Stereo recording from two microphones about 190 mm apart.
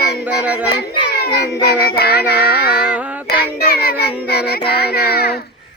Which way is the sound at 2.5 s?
55° left (ahead or behind).